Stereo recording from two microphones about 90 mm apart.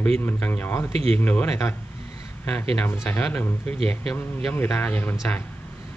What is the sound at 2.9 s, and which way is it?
Speech, 20° left (ahead or behind).